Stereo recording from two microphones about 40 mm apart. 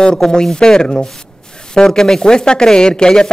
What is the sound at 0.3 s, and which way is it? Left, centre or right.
Speech, centre.